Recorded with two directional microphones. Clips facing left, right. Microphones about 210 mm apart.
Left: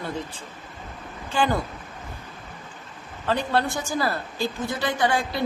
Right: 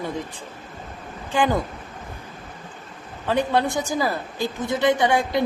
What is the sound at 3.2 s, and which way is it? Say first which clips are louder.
A woman's voice: right 3 dB; 15° right (ahead or behind).